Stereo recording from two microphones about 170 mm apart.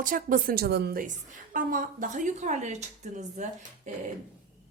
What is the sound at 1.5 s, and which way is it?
A woman's voice, 55° right (ahead or behind).